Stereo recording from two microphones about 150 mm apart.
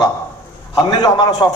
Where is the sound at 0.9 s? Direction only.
25° left (ahead or behind).